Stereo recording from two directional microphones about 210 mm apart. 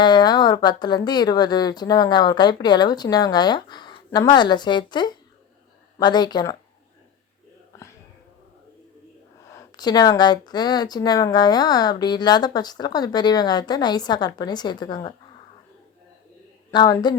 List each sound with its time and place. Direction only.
0.0 s speech: 20° left (ahead or behind)
9.5 s speech: 15° left (ahead or behind)
16.7 s speech: 20° left (ahead or behind)